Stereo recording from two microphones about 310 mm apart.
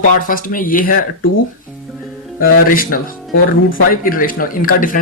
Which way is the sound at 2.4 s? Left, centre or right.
Left.